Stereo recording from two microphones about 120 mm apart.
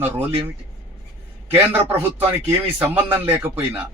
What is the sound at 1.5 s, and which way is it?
A man's voice, 15° right (ahead or behind).